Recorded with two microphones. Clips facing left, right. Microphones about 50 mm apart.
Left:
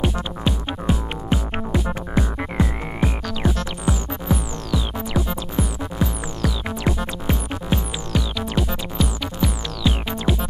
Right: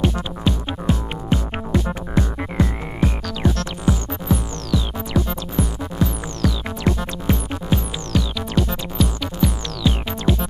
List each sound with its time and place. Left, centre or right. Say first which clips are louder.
0.5 s music: right 2 dB; centre